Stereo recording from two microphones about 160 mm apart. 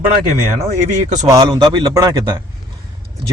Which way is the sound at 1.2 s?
25° right (ahead or behind).